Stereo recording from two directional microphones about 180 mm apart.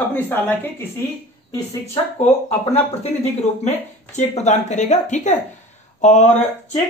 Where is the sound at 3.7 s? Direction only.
40° left (ahead or behind).